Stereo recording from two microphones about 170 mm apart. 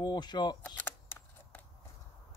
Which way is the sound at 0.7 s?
10° left (ahead or behind).